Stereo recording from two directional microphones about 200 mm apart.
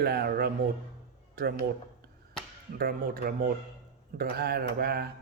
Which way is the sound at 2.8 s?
45° right (ahead or behind).